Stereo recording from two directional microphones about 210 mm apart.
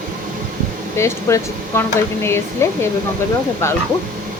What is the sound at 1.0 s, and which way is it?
A woman's voice, 15° left (ahead or behind).